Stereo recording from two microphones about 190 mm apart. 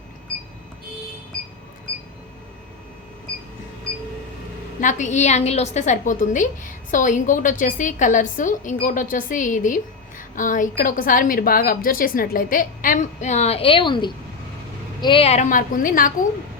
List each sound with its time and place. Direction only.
4.8 s a woman's voice: 40° left (ahead or behind)